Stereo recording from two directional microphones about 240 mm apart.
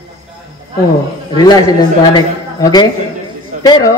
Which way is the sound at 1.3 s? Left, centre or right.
Centre.